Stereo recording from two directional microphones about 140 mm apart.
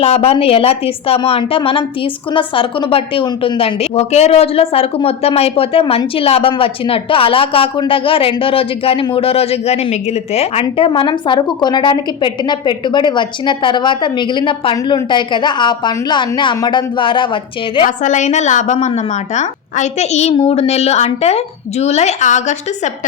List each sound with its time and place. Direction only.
0.0 s a woman's voice: 45° left (ahead or behind)
17.8 s a woman's voice: 60° left (ahead or behind)